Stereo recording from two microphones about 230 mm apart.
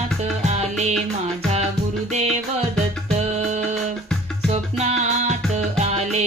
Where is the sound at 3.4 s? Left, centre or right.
Right.